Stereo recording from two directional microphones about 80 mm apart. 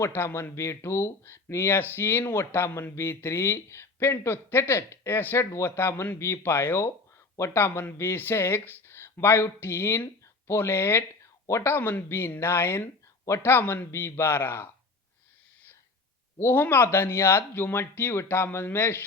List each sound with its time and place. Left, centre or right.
0.0 s speech: left
16.4 s speech: left